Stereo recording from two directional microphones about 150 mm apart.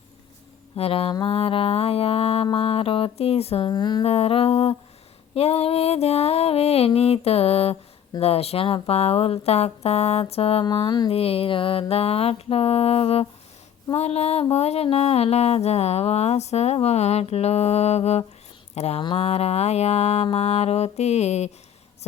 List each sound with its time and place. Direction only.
0.8 s speech: 40° left (ahead or behind)
3.7 s speech: 30° left (ahead or behind)
4.0 s speech: 40° left (ahead or behind)